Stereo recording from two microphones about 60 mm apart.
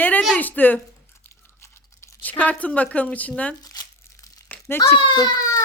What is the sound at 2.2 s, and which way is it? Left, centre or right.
Speech, left.